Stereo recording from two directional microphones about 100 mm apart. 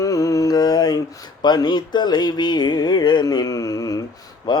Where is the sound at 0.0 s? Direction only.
35° left (ahead or behind).